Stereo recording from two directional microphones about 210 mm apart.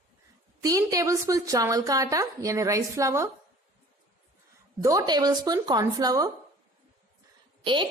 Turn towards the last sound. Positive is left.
turn(degrees=-25)  # may be behind; listen again after turning